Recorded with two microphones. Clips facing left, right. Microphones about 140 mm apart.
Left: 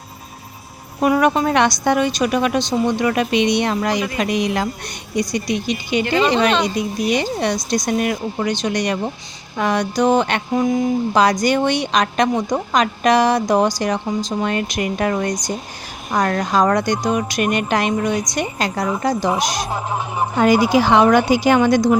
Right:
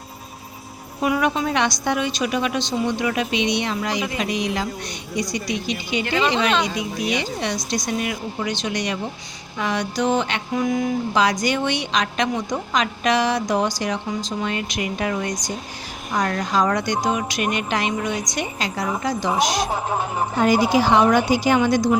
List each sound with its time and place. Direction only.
1.0 s a woman's voice: 50° left (ahead or behind)
6.1 s speech: centre (ahead or behind)
7.1 s a woman's voice: 50° left (ahead or behind)
10.5 s speech: 30° left (ahead or behind)
11.1 s a woman's voice: 45° left (ahead or behind)
20.4 s a woman's voice: 75° left (ahead or behind)